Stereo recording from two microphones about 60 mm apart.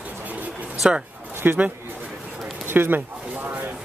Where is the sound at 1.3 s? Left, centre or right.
Right.